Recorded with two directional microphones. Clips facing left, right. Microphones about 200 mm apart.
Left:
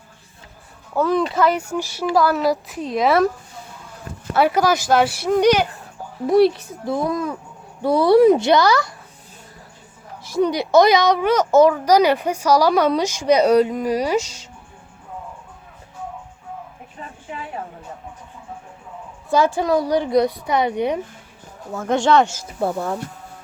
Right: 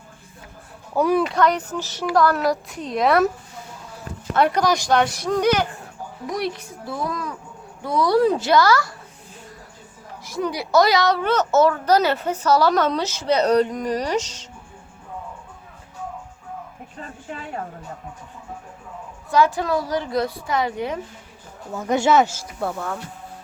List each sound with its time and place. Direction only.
0.9 s speech: 10° right (ahead or behind)
1.3 s a child's voice: 5° left (ahead or behind)
4.4 s speech: 5° left (ahead or behind)
6.2 s a woman's voice: 30° left (ahead or behind)
10.4 s a child's voice: 20° left (ahead or behind)
19.5 s a woman's voice: 20° left (ahead or behind)
21.7 s speech: centre (ahead or behind)
22.6 s speech: 35° left (ahead or behind)